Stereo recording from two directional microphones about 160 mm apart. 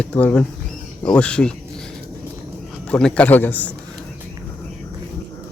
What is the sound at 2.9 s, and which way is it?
Speech, 5° left (ahead or behind).